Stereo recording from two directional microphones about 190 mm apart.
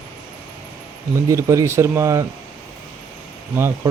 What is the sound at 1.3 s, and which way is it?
Speech, 15° right (ahead or behind).